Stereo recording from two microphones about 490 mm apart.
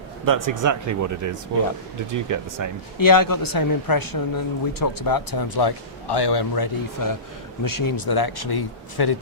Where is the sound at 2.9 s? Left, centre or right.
Left.